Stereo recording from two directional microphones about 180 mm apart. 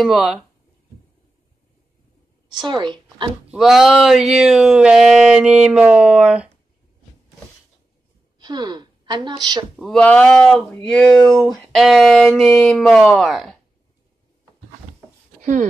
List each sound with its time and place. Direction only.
0.0 s speech: centre (ahead or behind)
2.6 s speech: 25° right (ahead or behind)
3.5 s speech: centre (ahead or behind)
8.4 s a woman's voice: 25° right (ahead or behind)
9.8 s speech: 5° left (ahead or behind)